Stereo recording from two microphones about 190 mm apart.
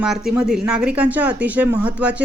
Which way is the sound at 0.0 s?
5° right (ahead or behind).